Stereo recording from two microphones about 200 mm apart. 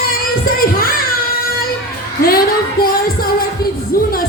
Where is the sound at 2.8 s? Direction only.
45° left (ahead or behind).